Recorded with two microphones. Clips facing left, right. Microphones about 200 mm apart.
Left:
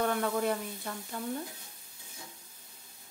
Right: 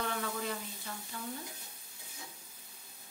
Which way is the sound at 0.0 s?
50° left (ahead or behind).